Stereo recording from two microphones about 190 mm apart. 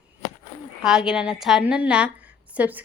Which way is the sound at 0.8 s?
5° right (ahead or behind).